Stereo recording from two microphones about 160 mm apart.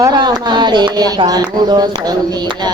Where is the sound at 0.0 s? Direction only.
25° right (ahead or behind).